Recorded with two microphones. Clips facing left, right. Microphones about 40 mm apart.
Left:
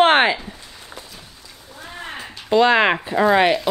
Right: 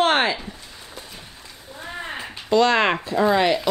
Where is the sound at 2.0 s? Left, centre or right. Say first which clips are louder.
Even; centre.